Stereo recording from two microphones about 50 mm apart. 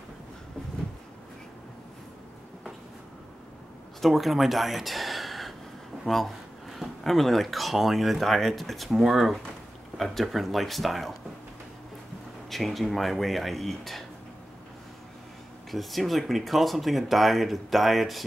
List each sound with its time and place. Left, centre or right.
4.0 s speech: centre
12.4 s speech: centre
15.7 s speech: centre